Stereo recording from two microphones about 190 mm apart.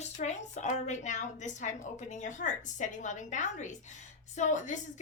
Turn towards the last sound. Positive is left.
turn(degrees=40)  # may be behind; listen again after turning